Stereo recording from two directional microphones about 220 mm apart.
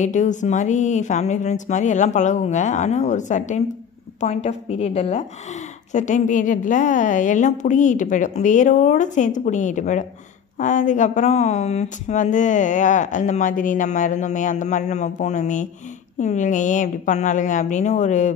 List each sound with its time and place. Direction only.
0.0 s a woman's voice: 35° left (ahead or behind)